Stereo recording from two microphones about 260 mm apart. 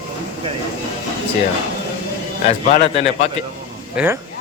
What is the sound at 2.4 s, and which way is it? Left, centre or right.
Speech, left.